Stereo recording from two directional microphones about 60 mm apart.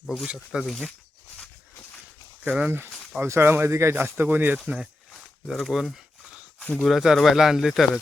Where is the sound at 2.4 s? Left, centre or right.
Centre.